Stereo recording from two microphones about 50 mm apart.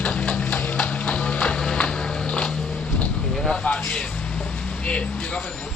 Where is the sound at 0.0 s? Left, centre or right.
Left.